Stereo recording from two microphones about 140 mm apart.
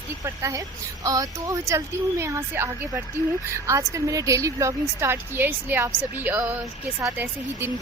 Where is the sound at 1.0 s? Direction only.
25° right (ahead or behind).